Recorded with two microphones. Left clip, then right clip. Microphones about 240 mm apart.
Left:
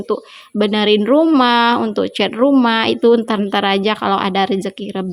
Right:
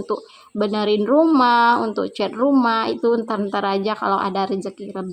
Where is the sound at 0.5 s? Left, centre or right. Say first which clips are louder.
Left 5 dB; left.